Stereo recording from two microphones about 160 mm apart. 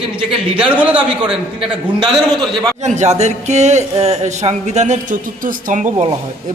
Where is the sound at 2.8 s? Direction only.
45° right (ahead or behind).